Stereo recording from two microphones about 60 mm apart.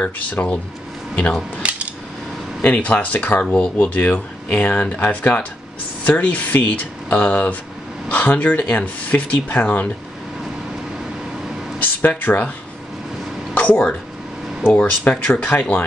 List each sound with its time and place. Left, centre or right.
0.3 s speech: left
1.6 s cutlery: centre
2.6 s speech: left
3.4 s speech: centre
3.7 s speech: left
11.8 s speech: left
13.6 s a sound: left
14.7 s speech: left